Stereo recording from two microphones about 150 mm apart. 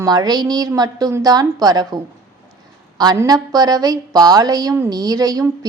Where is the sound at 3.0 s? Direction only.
25° right (ahead or behind).